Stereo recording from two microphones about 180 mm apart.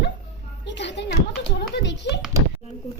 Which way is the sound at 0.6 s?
75° left (ahead or behind).